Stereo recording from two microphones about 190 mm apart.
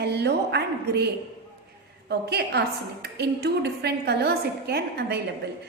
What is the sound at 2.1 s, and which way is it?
A woman's voice, 60° right (ahead or behind).